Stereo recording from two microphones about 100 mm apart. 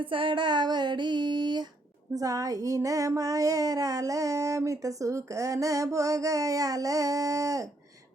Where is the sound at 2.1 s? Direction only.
35° right (ahead or behind).